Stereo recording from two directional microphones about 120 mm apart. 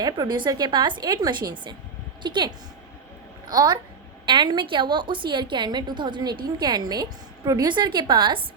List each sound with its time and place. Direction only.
0.0 s a woman's voice: 35° right (ahead or behind)
3.5 s a woman's voice: 35° right (ahead or behind)